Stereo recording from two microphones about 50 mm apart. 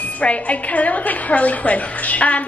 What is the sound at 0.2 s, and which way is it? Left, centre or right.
A woman's voice, left.